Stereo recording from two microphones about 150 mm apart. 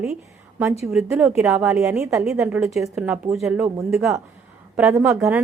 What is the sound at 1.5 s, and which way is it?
Speech, 15° right (ahead or behind).